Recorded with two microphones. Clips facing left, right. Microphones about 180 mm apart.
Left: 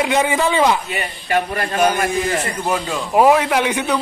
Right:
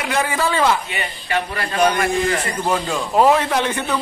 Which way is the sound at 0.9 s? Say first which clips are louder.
Left 3 dB; 45° left (ahead or behind).